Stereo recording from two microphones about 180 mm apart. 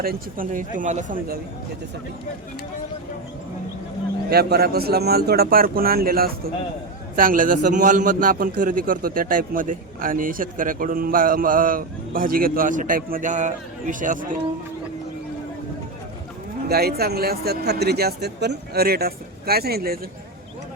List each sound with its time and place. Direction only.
0.0 s a man's voice: 55° right (ahead or behind)
0.8 s a man's voice: 45° right (ahead or behind)
4.3 s a man's voice: 60° right (ahead or behind)
16.6 s a man's voice: 60° right (ahead or behind)